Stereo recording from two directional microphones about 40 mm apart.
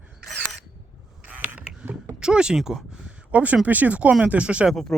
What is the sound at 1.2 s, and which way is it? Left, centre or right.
Creak, right.